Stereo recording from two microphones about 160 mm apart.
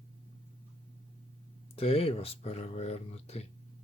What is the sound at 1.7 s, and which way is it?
Speech, 35° left (ahead or behind).